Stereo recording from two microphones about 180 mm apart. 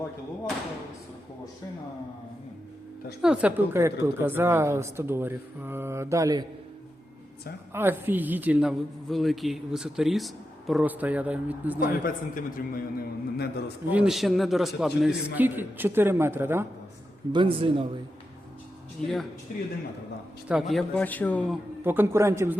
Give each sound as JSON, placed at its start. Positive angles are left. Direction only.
{"t": 3.2, "sound": "a woman's voice", "side_deg": -5}
{"t": 7.7, "sound": "a woman's voice", "side_deg": -10}
{"t": 11.8, "sound": "a man's voice", "side_deg": 50}
{"t": 13.9, "sound": "a man's voice", "side_deg": -5}
{"t": 17.3, "sound": "speech", "side_deg": -30}
{"t": 20.5, "sound": "a man's voice", "side_deg": 0}
{"t": 21.8, "sound": "a woman's voice", "side_deg": -15}